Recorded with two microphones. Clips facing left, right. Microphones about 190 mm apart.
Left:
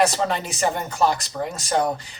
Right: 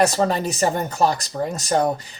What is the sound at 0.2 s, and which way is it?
Speech, 40° right (ahead or behind).